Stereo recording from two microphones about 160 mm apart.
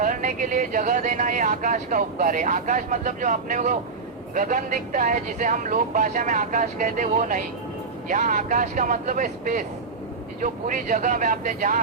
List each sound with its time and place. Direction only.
0.0 s speech: 55° right (ahead or behind)